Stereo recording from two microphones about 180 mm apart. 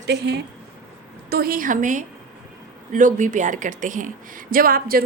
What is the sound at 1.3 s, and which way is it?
A woman's voice, 55° right (ahead or behind).